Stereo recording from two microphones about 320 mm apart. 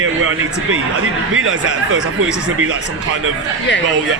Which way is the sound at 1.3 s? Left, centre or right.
Right.